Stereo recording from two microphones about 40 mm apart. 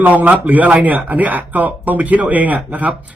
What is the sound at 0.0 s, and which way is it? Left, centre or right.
Speech, right.